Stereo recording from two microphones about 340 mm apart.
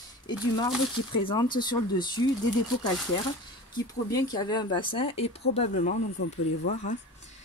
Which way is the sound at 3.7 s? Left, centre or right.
Centre.